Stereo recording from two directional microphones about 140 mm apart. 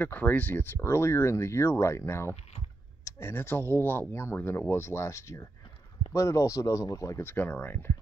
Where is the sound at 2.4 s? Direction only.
45° left (ahead or behind).